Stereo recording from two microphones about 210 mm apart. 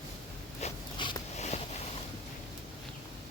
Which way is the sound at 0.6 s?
20° left (ahead or behind).